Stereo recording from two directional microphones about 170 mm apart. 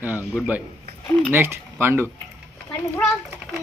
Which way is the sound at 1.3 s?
15° right (ahead or behind).